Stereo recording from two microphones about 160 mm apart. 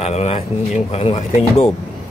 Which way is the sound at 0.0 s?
40° left (ahead or behind).